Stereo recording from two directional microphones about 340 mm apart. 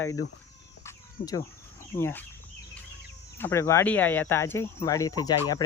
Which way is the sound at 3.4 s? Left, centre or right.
Centre.